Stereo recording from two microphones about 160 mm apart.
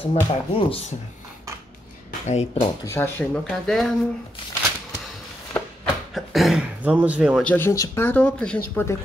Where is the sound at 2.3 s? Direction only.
40° left (ahead or behind).